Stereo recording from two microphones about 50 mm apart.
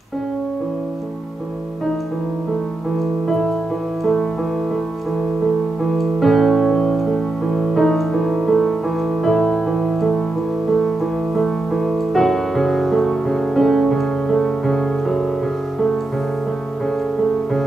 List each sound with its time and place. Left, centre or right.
3.3 s music: centre
5.9 s music: centre
11.3 s music: centre